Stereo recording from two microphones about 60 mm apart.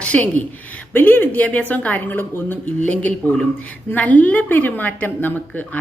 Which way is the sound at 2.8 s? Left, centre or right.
Left.